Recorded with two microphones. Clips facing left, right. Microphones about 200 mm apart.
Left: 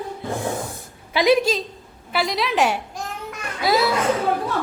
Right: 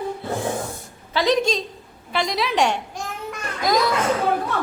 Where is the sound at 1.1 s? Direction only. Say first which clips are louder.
Left 2 dB; 10° left (ahead or behind).